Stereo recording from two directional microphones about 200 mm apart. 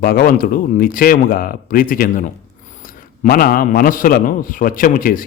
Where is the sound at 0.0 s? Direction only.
45° left (ahead or behind).